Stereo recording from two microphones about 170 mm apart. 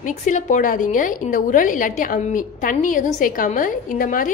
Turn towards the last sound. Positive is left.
turn(degrees=55)  # may be behind; listen again after turning